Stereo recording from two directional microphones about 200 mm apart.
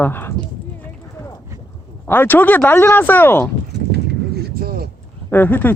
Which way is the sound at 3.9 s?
55° right (ahead or behind).